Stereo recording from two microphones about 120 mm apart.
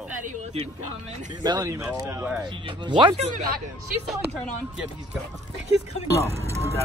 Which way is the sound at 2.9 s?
40° right (ahead or behind).